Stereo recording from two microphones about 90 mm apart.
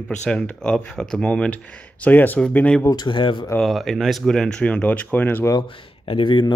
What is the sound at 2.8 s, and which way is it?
Speech, 60° left (ahead or behind).